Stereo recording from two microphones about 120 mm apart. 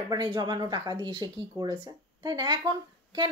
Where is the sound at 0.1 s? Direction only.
35° right (ahead or behind).